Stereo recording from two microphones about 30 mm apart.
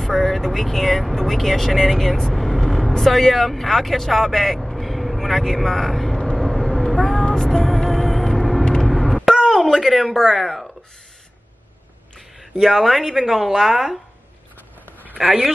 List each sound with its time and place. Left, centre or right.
0.0 s speech: centre
2.3 s vehicle: centre
3.0 s speech: centre
6.3 s vehicle: centre
7.5 s music: centre
8.6 s a sound: left
9.1 s a sound: centre
9.6 s speech: centre
12.5 s speech: centre
15.2 s speech: centre